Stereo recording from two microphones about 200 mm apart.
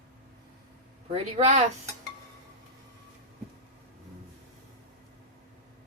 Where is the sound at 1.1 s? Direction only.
35° right (ahead or behind).